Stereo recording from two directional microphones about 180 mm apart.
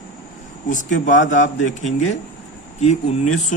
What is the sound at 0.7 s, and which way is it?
A man's voice, 45° left (ahead or behind).